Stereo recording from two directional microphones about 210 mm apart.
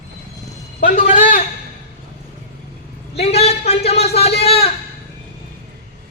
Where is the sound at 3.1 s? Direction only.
30° left (ahead or behind).